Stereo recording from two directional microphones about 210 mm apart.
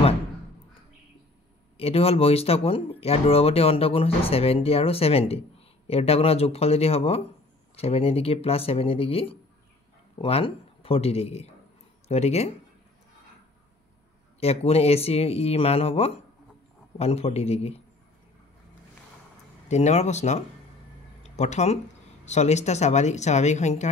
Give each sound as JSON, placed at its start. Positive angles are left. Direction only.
{"t": 1.8, "sound": "a woman's voice", "side_deg": 30}
{"t": 14.4, "sound": "a woman's voice", "side_deg": 30}
{"t": 19.7, "sound": "a woman's voice", "side_deg": 30}